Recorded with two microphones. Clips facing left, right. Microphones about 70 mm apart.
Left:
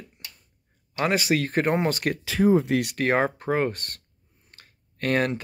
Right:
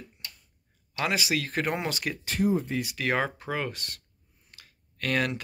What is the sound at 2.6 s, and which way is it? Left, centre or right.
Speech, left.